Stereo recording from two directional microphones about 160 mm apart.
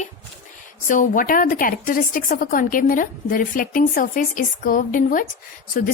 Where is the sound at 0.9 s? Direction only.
55° left (ahead or behind).